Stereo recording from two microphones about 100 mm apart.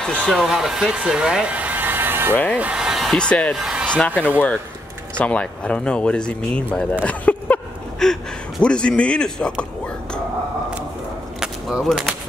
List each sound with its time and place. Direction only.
0.3 s speech: 5° right (ahead or behind); by 2.3 s 20° right (ahead or behind)
2.3 s speech: 15° left (ahead or behind)
2.6 s speech: 10° right (ahead or behind)
3.3 s speech: 10° left (ahead or behind)
3.5 s speech: 5° right (ahead or behind)
3.9 s speech: 15° left (ahead or behind)
7.1 s a sound: 15° left (ahead or behind)
8.0 s a man's voice: 5° left (ahead or behind)
11.3 s whip: 5° right (ahead or behind)